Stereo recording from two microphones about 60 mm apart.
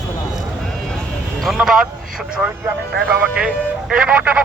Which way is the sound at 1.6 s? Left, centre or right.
Centre.